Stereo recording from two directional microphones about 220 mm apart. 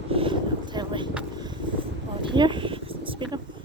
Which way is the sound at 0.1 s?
25° right (ahead or behind).